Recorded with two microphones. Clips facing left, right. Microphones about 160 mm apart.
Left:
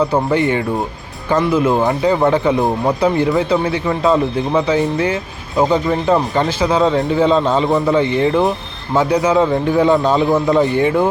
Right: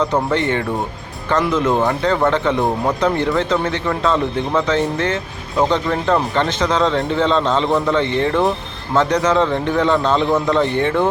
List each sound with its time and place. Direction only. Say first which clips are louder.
0.0 s speech: left 3 dB; 10° left (ahead or behind)